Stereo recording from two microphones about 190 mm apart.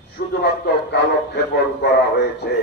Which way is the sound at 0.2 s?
50° left (ahead or behind).